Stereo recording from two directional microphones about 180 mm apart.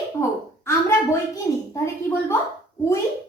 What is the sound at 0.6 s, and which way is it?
A woman's voice, 15° left (ahead or behind).